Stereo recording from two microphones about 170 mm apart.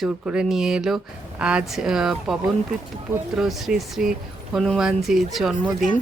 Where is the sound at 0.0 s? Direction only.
5° right (ahead or behind).